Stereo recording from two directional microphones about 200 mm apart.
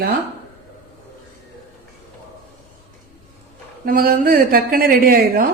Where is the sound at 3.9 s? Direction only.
45° right (ahead or behind).